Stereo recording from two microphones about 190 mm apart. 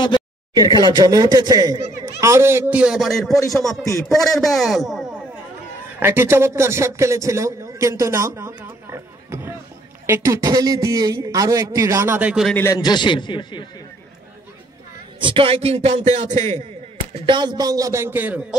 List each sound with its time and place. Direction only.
0.6 s a man's voice: 20° right (ahead or behind); by 5.0 s centre (ahead or behind)
5.9 s a man's voice: 10° right (ahead or behind)
12.5 s a man's voice: 15° left (ahead or behind)
15.1 s a man's voice: 25° right (ahead or behind)
17.1 s a man's voice: 25° right (ahead or behind); by 18.4 s 10° right (ahead or behind)